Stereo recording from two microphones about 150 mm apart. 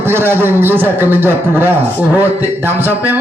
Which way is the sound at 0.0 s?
15° right (ahead or behind).